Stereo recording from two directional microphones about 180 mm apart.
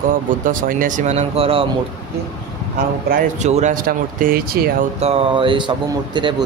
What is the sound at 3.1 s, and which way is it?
Speech, 40° right (ahead or behind).